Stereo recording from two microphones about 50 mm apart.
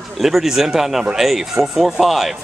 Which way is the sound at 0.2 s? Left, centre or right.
Centre.